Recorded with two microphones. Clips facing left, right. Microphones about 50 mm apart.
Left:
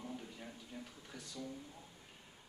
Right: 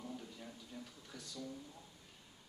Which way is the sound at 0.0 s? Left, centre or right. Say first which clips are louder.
Left 1 dB; left.